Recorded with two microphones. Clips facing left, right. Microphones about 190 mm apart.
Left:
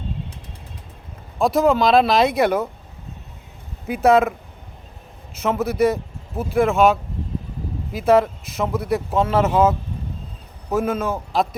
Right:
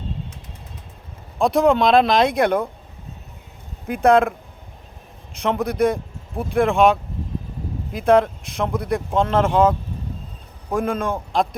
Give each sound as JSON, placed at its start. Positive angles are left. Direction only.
{"t": 1.4, "sound": "speech", "side_deg": 0}
{"t": 3.8, "sound": "speech", "side_deg": 5}